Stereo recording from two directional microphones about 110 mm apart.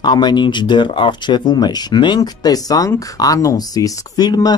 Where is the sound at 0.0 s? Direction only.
40° left (ahead or behind).